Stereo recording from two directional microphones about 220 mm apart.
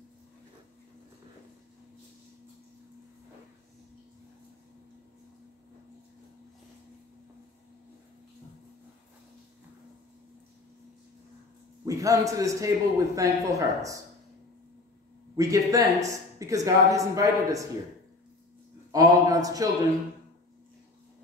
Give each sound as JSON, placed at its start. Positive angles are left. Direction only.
{"t": 11.8, "sound": "a man's voice", "side_deg": -15}
{"t": 15.3, "sound": "a man's voice", "side_deg": -15}
{"t": 18.9, "sound": "a man's voice", "side_deg": -15}